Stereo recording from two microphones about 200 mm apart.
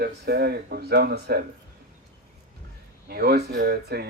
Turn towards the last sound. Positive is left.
turn(degrees=-55)  # may be behind; listen again after turning